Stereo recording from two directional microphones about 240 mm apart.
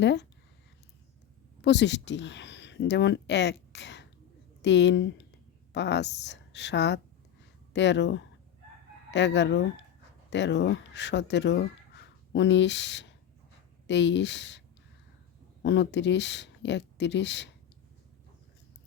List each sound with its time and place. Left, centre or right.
0.0 s speech: left
1.6 s speech: left
15.6 s speech: left